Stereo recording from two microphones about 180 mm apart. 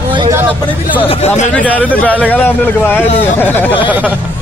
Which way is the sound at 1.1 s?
35° left (ahead or behind).